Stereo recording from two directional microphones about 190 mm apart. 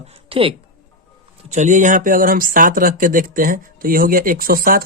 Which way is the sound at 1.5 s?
40° right (ahead or behind).